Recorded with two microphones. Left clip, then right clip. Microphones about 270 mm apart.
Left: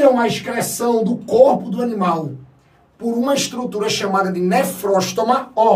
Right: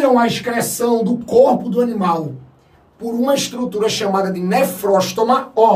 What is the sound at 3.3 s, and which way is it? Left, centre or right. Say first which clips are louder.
A man's voice: right 4 dB; centre.